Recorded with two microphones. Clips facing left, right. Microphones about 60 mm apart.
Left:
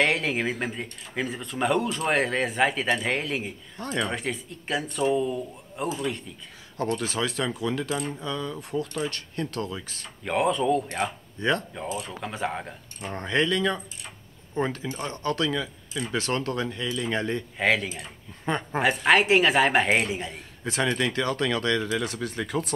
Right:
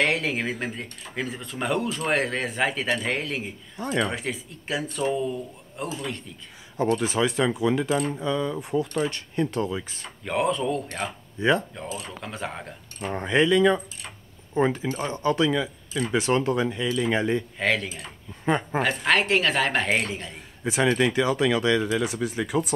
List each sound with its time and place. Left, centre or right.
0.0 s speech: centre
3.8 s speech: centre
6.8 s speech: right
10.2 s speech: centre
11.3 s speech: centre
12.2 s speech: centre
13.1 s speech: centre
17.6 s speech: centre
18.4 s speech: centre
18.8 s a woman's voice: centre
20.6 s speech: centre